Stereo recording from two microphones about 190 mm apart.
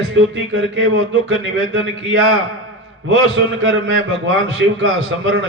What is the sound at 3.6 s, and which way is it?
Speech, 80° right.